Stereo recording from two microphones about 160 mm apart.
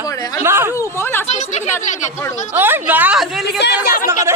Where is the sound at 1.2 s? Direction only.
45° left (ahead or behind).